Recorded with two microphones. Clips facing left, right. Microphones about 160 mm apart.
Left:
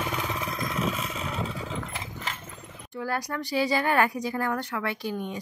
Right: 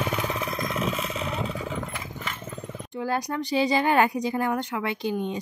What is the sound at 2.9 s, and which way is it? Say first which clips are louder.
Speech: right 3 dB; 20° right (ahead or behind).